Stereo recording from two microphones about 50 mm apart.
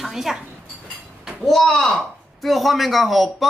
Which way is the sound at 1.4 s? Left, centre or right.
Centre.